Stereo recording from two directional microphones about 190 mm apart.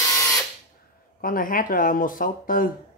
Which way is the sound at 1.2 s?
45° left (ahead or behind).